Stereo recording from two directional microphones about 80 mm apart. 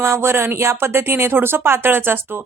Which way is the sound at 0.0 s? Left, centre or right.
Right.